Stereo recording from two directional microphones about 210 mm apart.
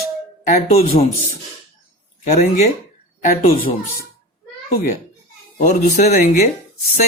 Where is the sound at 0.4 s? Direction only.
35° left (ahead or behind).